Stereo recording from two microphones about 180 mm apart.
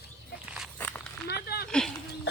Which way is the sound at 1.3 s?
60° left (ahead or behind).